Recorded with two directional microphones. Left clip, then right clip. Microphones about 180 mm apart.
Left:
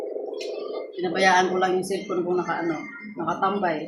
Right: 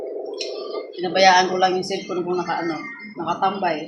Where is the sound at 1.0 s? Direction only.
15° right (ahead or behind).